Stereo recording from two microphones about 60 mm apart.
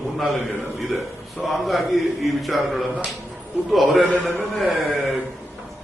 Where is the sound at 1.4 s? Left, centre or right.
Centre.